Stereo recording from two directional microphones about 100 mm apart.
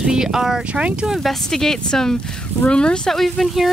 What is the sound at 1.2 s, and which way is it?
Speech, 5° left (ahead or behind).